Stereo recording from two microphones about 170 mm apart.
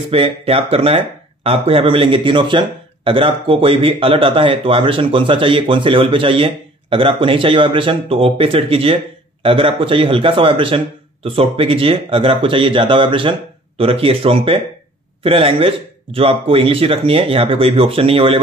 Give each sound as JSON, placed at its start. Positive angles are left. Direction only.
{"t": 0.1, "sound": "speech", "side_deg": -35}